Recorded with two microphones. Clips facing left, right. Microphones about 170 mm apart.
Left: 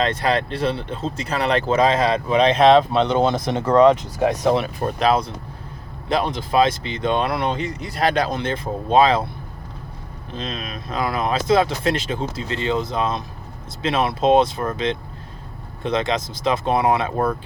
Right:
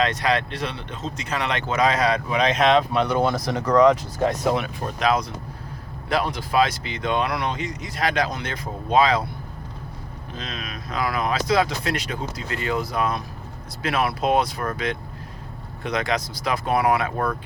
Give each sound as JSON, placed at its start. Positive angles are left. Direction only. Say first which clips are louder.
{"t": 0.0, "sound": "speech", "louder": "left 2 dB", "side_deg": 30}
{"t": 4.0, "sound": "speech", "louder": "left 3 dB", "side_deg": 15}
{"t": 4.9, "sound": "speech", "louder": "left 2 dB", "side_deg": 30}
{"t": 10.3, "sound": "speech", "louder": "left 5 dB", "side_deg": 25}